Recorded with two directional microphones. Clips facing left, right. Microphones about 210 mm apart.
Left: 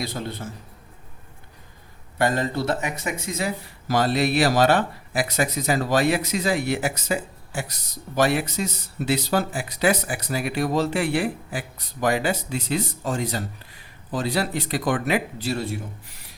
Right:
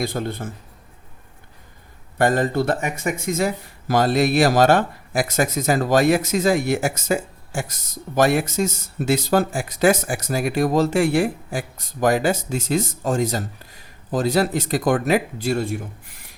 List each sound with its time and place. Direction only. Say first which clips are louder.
0.0 s speech: right 5 dB; 50° right (ahead or behind)
2.1 s speech: right 4 dB; 50° right (ahead or behind)